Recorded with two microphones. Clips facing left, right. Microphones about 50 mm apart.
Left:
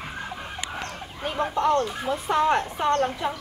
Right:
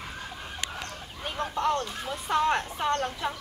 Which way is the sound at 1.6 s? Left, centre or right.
Centre.